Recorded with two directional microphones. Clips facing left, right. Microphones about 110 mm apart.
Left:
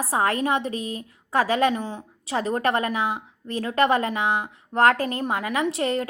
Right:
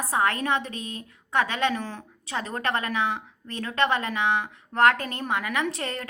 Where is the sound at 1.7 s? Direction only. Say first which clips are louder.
Left 3 dB; 15° left (ahead or behind).